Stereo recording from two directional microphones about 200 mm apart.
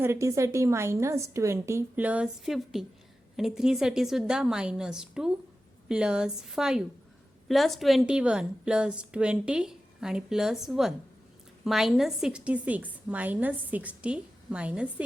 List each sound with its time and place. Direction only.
0.0 s a woman's voice: 15° right (ahead or behind)